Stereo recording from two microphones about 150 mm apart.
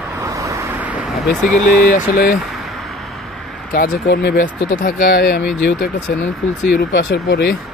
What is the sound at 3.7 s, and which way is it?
Speech, 80° left.